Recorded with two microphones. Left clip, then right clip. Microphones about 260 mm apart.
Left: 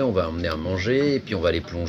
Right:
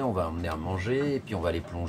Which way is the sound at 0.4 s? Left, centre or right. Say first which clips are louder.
Left 7 dB; centre.